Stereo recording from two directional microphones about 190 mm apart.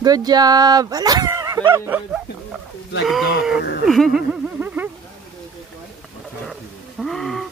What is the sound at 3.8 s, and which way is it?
Speech, centre (ahead or behind).